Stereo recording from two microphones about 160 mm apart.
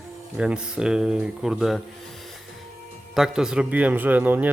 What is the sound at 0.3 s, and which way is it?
A man's voice, 5° right (ahead or behind).